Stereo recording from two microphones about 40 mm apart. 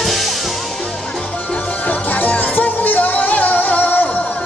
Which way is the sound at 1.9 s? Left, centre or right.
Left.